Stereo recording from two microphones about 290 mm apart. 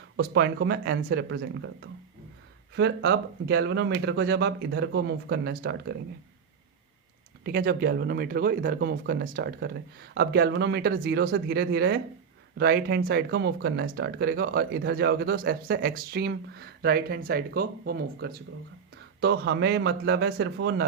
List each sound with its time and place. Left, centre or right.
0.2 s speech: right
2.7 s speech: right
7.4 s speech: right